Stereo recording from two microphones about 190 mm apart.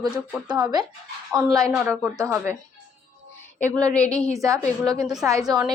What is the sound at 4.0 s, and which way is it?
A woman's voice, 15° right (ahead or behind).